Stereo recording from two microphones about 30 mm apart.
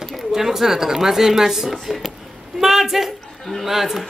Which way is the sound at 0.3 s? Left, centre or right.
Centre.